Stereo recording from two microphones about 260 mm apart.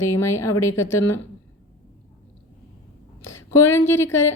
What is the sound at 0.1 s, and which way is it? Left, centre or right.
A woman's voice, centre.